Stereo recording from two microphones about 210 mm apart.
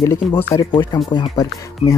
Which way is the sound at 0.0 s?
15° left (ahead or behind).